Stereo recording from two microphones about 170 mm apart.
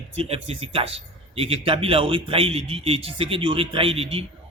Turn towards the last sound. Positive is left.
turn(degrees=-35)  # may be behind; listen again after turning